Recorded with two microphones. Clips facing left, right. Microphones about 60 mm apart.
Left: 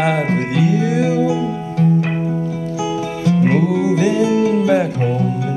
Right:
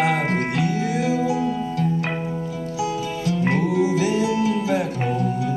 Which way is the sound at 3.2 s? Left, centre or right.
Left.